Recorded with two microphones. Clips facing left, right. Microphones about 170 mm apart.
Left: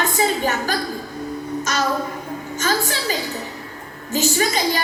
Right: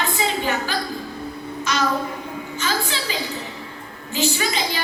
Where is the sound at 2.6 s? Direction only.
45° left (ahead or behind).